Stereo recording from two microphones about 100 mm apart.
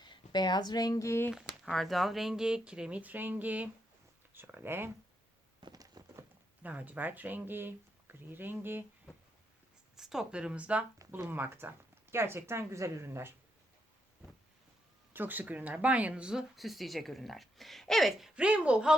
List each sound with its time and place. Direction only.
0.0 s speech: 50° left (ahead or behind); by 1.3 s 30° left (ahead or behind)
1.3 s speech: 5° right (ahead or behind); by 4.9 s 20° right (ahead or behind)
5.5 s a sound: 45° right (ahead or behind)
6.6 s speech: 15° right (ahead or behind)
9.9 s speech: 5° right (ahead or behind); by 13.3 s 25° right (ahead or behind)
15.1 s speech: 20° right (ahead or behind)